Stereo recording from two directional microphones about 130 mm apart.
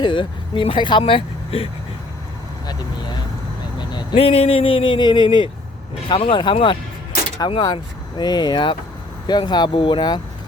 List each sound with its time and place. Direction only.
0.0 s speech: 40° left (ahead or behind)
3.8 s speech: 45° left (ahead or behind)